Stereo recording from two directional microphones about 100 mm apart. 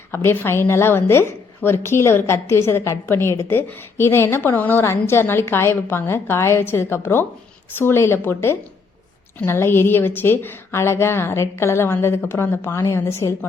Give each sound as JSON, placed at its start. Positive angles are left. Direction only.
{"t": 0.1, "sound": "a woman's voice", "side_deg": 25}